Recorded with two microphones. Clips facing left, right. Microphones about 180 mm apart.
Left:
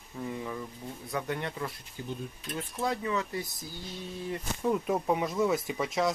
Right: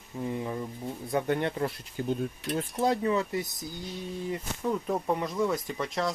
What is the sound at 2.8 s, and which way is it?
Speech, 35° right (ahead or behind).